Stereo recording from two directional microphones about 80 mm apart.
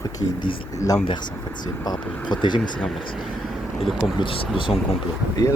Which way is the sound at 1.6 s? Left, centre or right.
Left.